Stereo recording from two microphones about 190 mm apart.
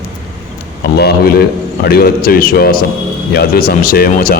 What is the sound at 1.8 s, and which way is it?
Speech, 50° left (ahead or behind).